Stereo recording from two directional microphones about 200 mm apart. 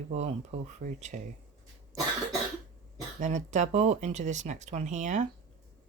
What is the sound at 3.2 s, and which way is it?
Speech, 35° right (ahead or behind).